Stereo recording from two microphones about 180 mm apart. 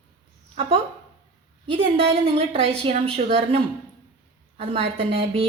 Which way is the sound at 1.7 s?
30° right (ahead or behind).